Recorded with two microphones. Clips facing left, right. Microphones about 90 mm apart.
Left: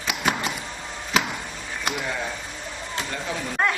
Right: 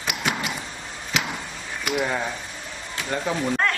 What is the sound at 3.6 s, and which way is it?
Chopping, 15° left (ahead or behind).